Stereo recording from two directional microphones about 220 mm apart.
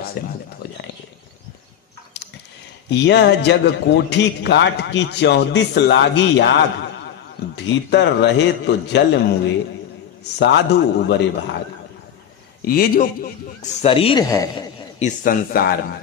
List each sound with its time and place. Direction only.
0.2 s a man's voice: 45° left (ahead or behind)
2.1 s a sound: 50° left (ahead or behind)
2.9 s a man's voice: 50° left (ahead or behind)
10.4 s a man's voice: 50° left (ahead or behind)
12.6 s a man's voice: 40° left (ahead or behind)
13.8 s a man's voice: 25° left (ahead or behind)
15.0 s a man's voice: 35° left (ahead or behind)